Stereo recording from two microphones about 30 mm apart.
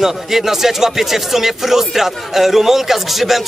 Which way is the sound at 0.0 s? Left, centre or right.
Centre.